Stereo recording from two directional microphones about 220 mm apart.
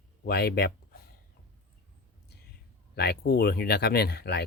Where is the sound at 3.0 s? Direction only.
45° left (ahead or behind).